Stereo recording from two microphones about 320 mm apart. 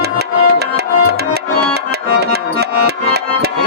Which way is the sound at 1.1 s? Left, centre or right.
Right.